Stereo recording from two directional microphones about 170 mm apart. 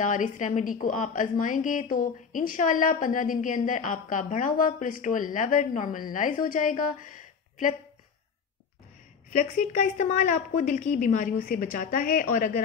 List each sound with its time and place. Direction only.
0.0 s a woman's voice: 50° left (ahead or behind)
9.3 s a woman's voice: 50° left (ahead or behind)